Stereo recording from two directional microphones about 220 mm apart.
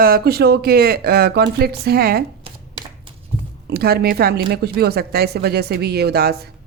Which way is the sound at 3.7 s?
45° right (ahead or behind).